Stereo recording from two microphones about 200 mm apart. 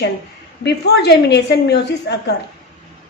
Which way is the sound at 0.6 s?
55° left (ahead or behind).